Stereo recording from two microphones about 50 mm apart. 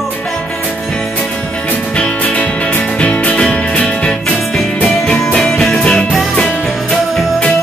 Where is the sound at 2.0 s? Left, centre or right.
Left.